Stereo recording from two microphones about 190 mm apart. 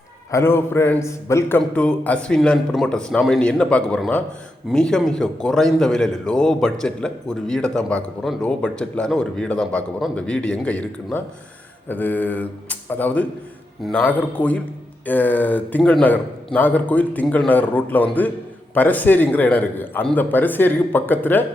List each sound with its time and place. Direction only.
0.3 s a man's voice: 15° left (ahead or behind)